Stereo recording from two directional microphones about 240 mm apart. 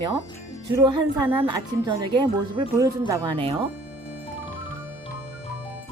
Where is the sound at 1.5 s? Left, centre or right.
Centre.